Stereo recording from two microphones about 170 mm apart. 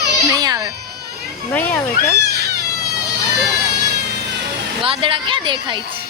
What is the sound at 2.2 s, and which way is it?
Cat, 70° right (ahead or behind).